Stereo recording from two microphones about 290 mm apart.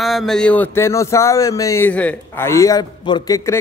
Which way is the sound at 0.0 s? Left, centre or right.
Centre.